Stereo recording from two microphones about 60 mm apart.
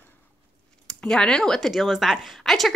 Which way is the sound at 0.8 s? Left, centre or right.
Centre.